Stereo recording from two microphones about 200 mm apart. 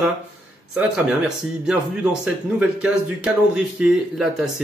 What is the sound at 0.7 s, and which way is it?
Speech, 5° right (ahead or behind).